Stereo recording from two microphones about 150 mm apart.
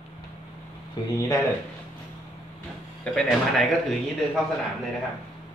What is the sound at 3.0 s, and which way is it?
Speech, 5° left (ahead or behind).